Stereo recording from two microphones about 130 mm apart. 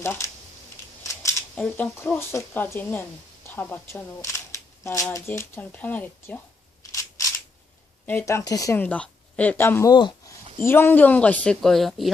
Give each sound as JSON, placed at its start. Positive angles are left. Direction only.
{"t": 0.0, "sound": "speech", "side_deg": 20}
{"t": 1.0, "sound": "a sound", "side_deg": 20}
{"t": 1.5, "sound": "speech", "side_deg": 10}
{"t": 6.9, "sound": "single-lens reflex camera", "side_deg": 25}
{"t": 8.0, "sound": "speech", "side_deg": 20}
{"t": 8.8, "sound": "speech", "side_deg": 10}
{"t": 9.9, "sound": "speech", "side_deg": 35}
{"t": 10.6, "sound": "speech", "side_deg": 15}